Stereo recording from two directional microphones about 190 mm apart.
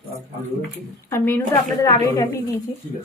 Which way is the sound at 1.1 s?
10° left (ahead or behind).